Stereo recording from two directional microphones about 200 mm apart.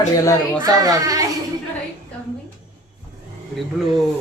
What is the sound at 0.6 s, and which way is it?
Speech, 20° right (ahead or behind).